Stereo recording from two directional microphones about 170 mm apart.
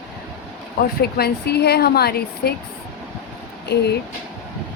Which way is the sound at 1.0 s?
70° left (ahead or behind).